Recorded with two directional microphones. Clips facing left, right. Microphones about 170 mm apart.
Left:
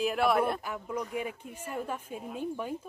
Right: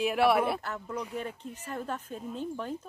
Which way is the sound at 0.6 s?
10° left (ahead or behind).